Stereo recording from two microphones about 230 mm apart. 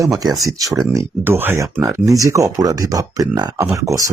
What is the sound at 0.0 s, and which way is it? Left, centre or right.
Speech, centre.